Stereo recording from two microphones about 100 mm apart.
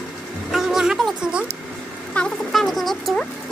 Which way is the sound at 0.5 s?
5° right (ahead or behind).